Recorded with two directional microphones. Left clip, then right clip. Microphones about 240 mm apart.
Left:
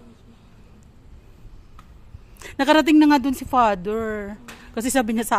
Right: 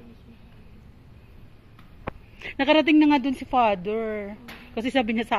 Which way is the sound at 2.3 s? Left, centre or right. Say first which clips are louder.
Left 3 dB; left.